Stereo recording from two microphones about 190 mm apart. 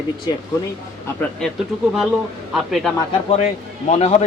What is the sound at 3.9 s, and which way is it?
Speech, 35° left (ahead or behind).